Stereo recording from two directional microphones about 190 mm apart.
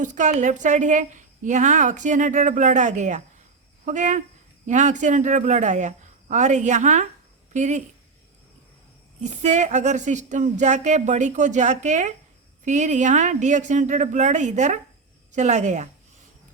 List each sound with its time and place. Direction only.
0.0 s a woman's voice: 40° right (ahead or behind)
9.2 s a woman's voice: 40° right (ahead or behind)